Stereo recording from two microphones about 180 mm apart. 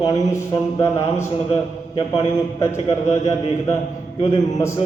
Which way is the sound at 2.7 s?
35° left (ahead or behind).